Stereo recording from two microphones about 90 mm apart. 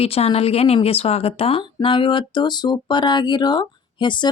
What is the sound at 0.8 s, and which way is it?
Speech, 90° left.